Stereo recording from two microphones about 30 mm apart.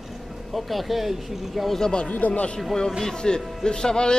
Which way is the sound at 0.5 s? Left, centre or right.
Centre.